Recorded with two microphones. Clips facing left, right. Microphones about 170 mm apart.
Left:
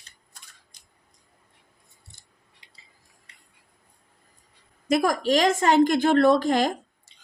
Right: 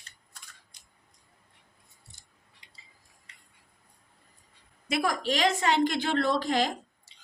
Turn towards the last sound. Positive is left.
turn(degrees=50)  # may be behind; listen again after turning